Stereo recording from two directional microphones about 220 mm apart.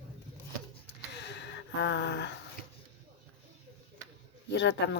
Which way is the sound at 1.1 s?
50° left (ahead or behind).